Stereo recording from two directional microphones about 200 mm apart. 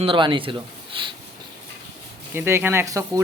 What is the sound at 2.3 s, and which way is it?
Speech, 10° right (ahead or behind).